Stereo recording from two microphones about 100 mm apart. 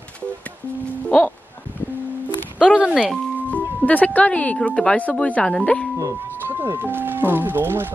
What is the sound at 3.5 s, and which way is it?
Speech, 15° left (ahead or behind).